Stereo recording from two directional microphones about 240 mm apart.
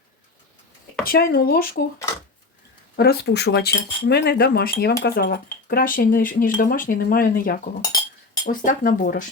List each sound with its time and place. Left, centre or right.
1.0 s speech: left
2.9 s speech: left